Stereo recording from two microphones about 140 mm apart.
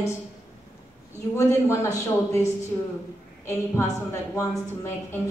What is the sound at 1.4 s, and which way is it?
A woman's voice, 20° left (ahead or behind).